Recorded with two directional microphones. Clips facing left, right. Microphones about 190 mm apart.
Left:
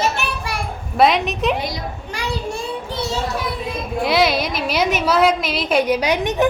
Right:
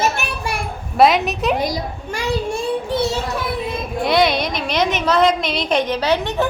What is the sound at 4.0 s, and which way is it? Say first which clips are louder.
A woman's voice: right 1 dB; 5° left (ahead or behind).